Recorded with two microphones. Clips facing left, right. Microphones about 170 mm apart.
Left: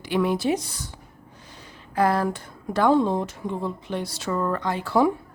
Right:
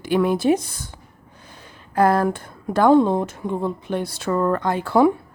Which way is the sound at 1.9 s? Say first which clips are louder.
Right 4 dB; 50° right (ahead or behind).